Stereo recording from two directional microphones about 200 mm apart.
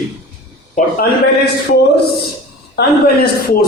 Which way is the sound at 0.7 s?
50° left (ahead or behind).